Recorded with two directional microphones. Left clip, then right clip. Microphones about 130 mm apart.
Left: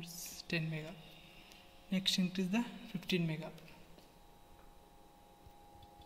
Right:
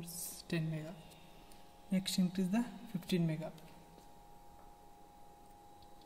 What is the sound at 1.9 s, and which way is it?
Speech, 60° right (ahead or behind).